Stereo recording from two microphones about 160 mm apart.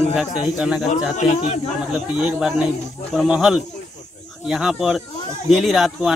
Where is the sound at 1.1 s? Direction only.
45° left (ahead or behind).